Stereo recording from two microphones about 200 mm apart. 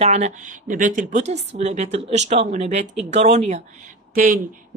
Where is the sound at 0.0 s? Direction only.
35° right (ahead or behind).